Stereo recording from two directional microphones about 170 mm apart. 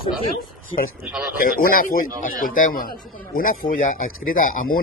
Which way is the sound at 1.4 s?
55° left (ahead or behind).